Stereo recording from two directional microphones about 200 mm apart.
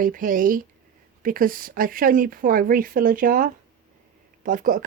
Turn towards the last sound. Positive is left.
turn(degrees=-40)  # may be behind; listen again after turning